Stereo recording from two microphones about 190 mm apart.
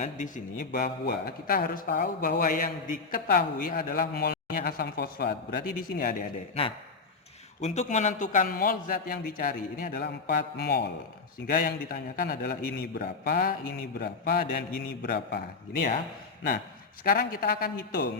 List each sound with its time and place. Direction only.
0.0 s a man's voice: 40° left (ahead or behind)
7.6 s a man's voice: 35° left (ahead or behind); by 15.9 s 55° left (ahead or behind)
17.0 s a man's voice: 50° left (ahead or behind)